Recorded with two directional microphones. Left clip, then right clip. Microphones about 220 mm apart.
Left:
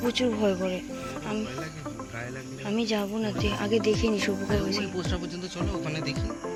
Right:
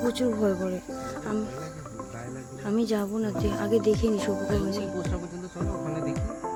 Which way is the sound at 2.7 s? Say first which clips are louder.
Right 1 dB; 25° right (ahead or behind).